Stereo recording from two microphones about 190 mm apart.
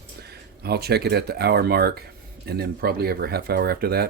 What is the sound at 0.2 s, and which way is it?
Speech, 55° right (ahead or behind).